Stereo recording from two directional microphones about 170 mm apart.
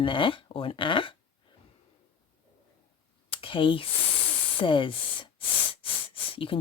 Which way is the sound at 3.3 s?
30° left (ahead or behind).